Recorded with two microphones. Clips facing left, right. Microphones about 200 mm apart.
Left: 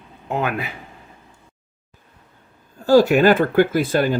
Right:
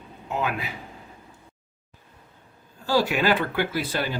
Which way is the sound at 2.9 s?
45° left (ahead or behind).